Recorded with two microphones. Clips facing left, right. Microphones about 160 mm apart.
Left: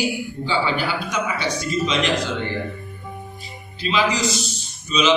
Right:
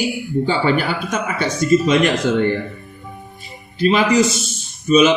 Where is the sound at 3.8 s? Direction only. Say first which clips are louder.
Right 7 dB; 55° right (ahead or behind).